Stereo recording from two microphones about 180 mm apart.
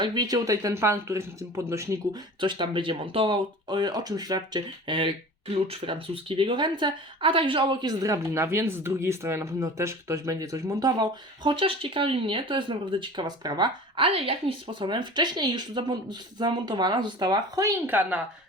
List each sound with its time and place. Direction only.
0.0 s speech: 25° right (ahead or behind)